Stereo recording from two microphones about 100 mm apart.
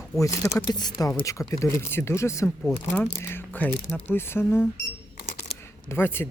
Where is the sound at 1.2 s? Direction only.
30° left (ahead or behind).